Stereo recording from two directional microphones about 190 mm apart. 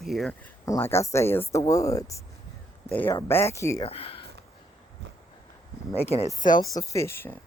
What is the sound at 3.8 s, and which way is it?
Speech, 30° left (ahead or behind).